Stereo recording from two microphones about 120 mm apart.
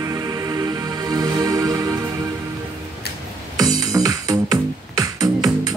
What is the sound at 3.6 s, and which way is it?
Music, 30° right (ahead or behind).